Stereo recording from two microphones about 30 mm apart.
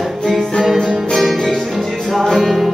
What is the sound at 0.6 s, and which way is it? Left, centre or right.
Music, centre.